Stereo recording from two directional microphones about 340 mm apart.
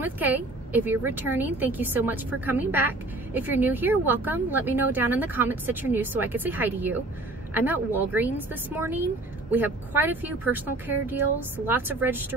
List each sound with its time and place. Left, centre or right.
0.0 s speech: centre